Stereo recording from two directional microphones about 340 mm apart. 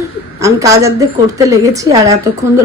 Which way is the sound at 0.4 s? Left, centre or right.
Centre.